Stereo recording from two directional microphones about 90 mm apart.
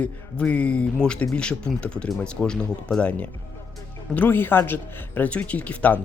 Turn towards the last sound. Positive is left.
turn(degrees=15)  # may be behind; listen again after turning